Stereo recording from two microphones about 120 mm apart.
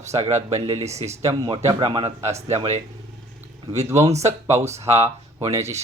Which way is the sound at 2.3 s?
65° right (ahead or behind).